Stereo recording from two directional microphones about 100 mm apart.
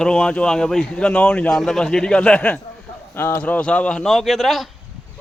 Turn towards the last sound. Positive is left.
turn(degrees=0)  # may be behind; listen again after turning